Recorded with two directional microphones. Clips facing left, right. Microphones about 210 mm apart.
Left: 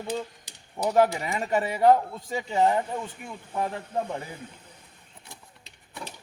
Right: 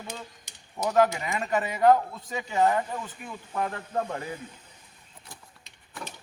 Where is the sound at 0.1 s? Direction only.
35° left (ahead or behind).